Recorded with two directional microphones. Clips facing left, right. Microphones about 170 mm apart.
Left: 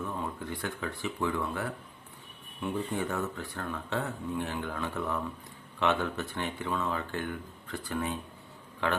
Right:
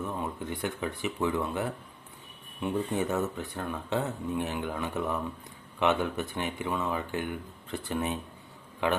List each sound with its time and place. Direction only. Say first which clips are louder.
0.0 s speech: right 2 dB; 20° right (ahead or behind)